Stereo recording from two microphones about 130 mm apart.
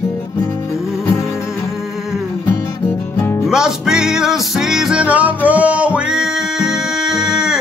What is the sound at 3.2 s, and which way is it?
Music, 20° left (ahead or behind).